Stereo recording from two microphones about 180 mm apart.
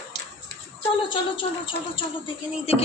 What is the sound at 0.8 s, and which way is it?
A woman's voice, 30° left (ahead or behind).